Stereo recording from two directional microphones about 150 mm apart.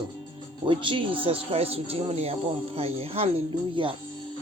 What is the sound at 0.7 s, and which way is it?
Speech, 35° right (ahead or behind).